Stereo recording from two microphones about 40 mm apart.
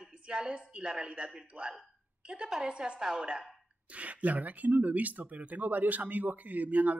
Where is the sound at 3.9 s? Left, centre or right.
Right.